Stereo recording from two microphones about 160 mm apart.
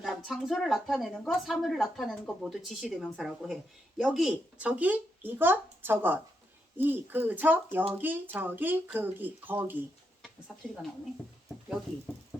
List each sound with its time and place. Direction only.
0.0 s a woman's voice: centre (ahead or behind)